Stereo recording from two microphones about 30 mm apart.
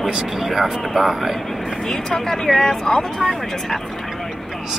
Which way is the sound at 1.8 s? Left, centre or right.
Centre.